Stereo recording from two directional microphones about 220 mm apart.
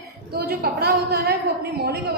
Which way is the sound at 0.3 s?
45° right (ahead or behind).